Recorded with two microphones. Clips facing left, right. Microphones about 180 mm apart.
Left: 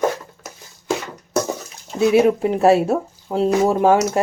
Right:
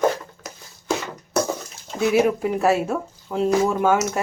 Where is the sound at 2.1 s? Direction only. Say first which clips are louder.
Left 3 dB; 25° left (ahead or behind).